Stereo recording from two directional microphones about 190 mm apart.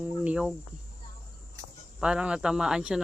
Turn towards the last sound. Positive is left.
turn(degrees=-5)  # may be behind; listen again after turning